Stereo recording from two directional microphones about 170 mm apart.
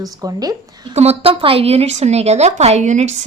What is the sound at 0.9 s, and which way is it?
A woman's voice, 40° right (ahead or behind).